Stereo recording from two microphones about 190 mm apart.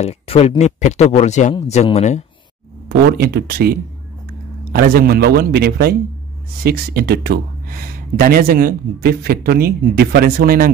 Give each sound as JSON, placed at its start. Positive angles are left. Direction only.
{"t": 0.0, "sound": "speech", "side_deg": 30}
{"t": 2.9, "sound": "a man's voice", "side_deg": -60}
{"t": 4.7, "sound": "a man's voice", "side_deg": -55}